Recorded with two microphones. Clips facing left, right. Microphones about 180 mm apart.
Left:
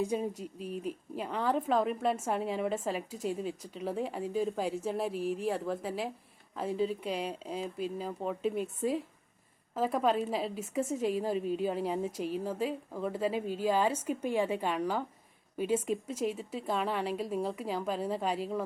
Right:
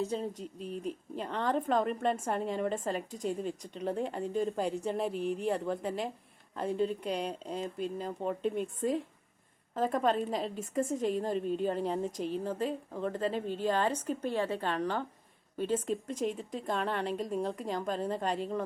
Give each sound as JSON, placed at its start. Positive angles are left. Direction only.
{"t": 0.0, "sound": "a woman's voice", "side_deg": 10}